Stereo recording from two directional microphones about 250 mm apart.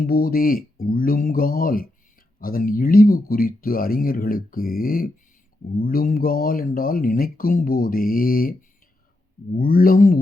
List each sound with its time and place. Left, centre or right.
0.0 s speech: left
9.6 s speech: left